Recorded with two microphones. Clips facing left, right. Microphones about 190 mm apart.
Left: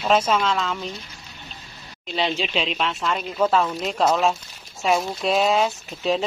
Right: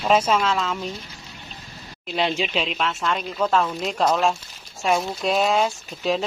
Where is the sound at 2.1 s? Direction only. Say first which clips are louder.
Right 1 dB; 5° right (ahead or behind).